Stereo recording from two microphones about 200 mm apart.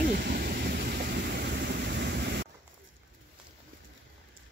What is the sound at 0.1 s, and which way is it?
Vehicle, 50° right (ahead or behind).